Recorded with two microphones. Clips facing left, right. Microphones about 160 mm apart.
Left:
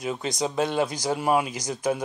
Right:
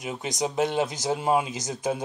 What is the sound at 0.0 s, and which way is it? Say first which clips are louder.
Speech: left 2 dB; 20° right (ahead or behind).